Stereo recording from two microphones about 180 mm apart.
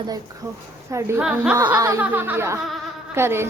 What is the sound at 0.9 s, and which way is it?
Laughter, 15° right (ahead or behind).